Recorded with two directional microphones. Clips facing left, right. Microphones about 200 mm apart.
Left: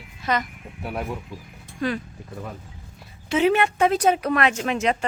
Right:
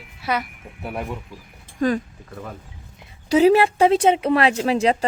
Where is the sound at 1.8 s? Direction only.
45° right (ahead or behind).